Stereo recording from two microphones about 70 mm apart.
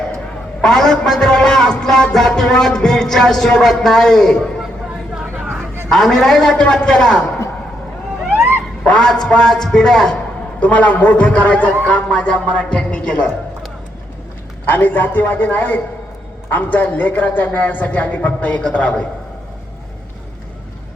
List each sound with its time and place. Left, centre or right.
0.6 s a man's voice: centre
5.9 s a man's voice: centre
8.8 s a man's voice: centre
10.6 s a man's voice: left
14.7 s a man's voice: left